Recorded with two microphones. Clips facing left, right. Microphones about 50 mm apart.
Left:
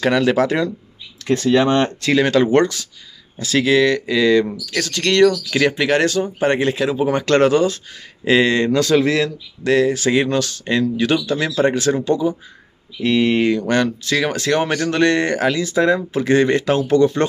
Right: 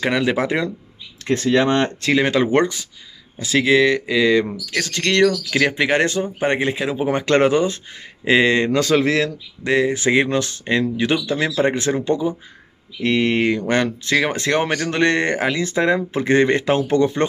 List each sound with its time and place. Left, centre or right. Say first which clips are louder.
0.0 s speech: left 3 dB; centre
1.2 s speech: left 2 dB; right; by 5.8 s centre
5.8 s speech: left 1 dB; right
13.0 s mantra: left 2 dB; right
14.1 s speech: even; right